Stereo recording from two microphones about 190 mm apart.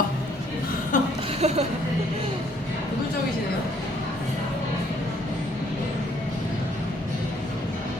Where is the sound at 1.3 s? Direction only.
35° right (ahead or behind).